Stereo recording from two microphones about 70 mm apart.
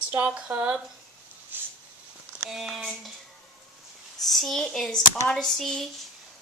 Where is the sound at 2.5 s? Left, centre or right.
Centre.